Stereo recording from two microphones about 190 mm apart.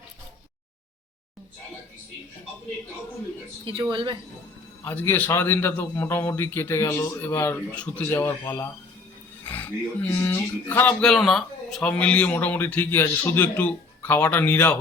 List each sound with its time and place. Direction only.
3.6 s speech: 25° right (ahead or behind)
4.8 s speech: 10° left (ahead or behind)